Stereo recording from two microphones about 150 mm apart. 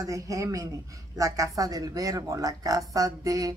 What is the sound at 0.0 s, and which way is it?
Speech, 20° right (ahead or behind).